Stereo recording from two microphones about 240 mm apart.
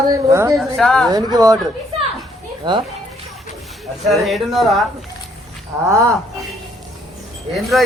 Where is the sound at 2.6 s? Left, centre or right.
Centre.